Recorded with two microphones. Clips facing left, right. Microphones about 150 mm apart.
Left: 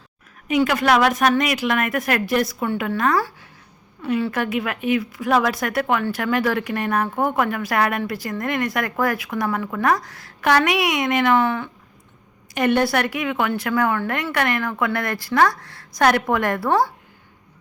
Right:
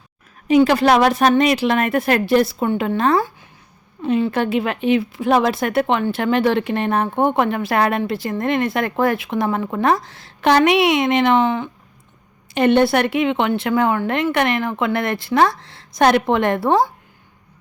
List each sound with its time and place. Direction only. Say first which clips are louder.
0.4 s speech: right 5 dB; 30° right (ahead or behind)